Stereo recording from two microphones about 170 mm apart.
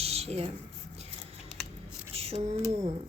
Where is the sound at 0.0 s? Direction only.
40° right (ahead or behind).